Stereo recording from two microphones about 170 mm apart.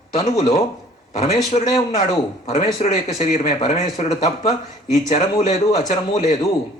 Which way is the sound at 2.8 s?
40° left (ahead or behind).